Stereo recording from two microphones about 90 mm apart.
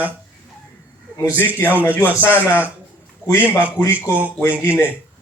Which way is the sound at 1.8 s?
20° left (ahead or behind).